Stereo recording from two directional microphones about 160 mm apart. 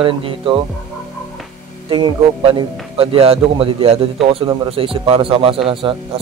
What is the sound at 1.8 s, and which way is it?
A man's voice, 30° right (ahead or behind).